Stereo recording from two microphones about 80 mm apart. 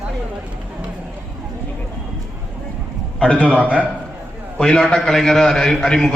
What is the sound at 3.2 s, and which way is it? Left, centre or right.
Speech, centre.